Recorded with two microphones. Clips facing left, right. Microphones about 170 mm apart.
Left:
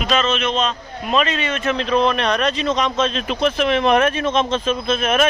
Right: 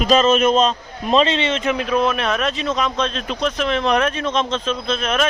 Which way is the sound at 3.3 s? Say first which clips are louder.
Left 3 dB; 10° left (ahead or behind).